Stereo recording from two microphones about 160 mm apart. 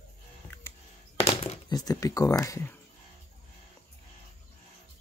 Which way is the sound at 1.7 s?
25° left (ahead or behind).